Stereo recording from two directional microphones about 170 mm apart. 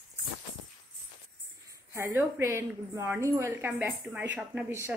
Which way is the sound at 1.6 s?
15° right (ahead or behind).